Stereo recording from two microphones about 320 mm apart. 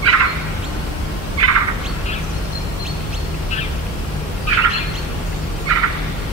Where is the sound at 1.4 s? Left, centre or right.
Right.